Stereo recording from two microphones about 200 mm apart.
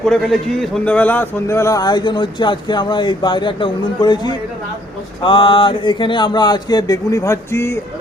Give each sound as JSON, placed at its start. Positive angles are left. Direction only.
{"t": 0.0, "sound": "a man's voice", "side_deg": 5}